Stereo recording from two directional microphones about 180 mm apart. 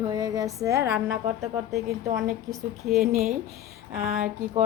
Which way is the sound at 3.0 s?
55° right (ahead or behind).